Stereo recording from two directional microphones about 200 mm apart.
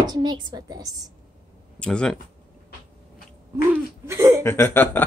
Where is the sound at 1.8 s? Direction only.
5° left (ahead or behind).